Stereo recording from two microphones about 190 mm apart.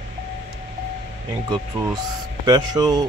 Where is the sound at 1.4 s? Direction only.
25° right (ahead or behind).